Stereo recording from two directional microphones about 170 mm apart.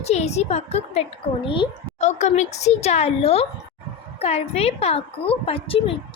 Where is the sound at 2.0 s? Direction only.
40° left (ahead or behind).